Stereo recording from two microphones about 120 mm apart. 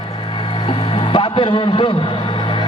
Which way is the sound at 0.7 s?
45° left (ahead or behind).